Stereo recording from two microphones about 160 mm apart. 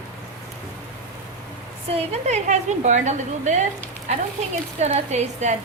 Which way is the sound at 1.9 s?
45° right (ahead or behind).